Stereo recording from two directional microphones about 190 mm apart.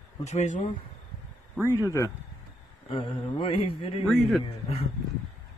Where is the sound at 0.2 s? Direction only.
35° left (ahead or behind).